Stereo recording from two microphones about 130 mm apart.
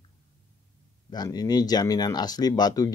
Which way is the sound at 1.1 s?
30° left (ahead or behind).